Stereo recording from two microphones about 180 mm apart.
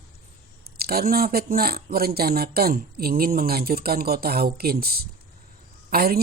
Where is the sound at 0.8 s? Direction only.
55° right (ahead or behind).